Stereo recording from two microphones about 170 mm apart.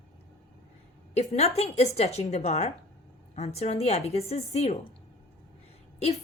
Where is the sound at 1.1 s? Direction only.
40° left (ahead or behind).